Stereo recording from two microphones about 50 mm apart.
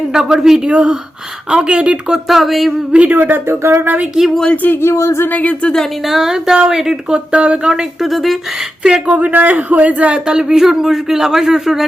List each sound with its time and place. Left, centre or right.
0.1 s speech: centre
2.2 s speech: centre
3.1 s a man's voice: right
3.5 s speech: right
4.4 s speech: left
4.8 s a sound: left
5.3 s speech: left
6.1 s speech: centre; by 7.7 s right
7.7 s speech: centre
8.8 s speech: centre
9.1 s a man's voice: right
10.2 s speech: centre